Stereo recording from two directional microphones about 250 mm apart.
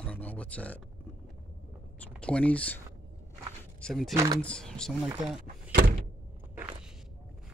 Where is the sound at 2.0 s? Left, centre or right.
Centre.